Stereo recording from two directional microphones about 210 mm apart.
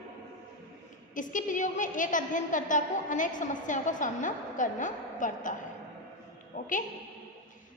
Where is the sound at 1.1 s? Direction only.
40° left (ahead or behind).